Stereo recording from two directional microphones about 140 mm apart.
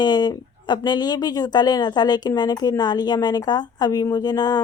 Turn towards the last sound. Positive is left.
turn(degrees=30)  # may be behind; listen again after turning